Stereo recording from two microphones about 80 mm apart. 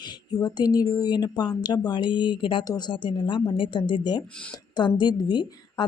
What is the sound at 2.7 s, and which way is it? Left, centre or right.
A woman's voice, left.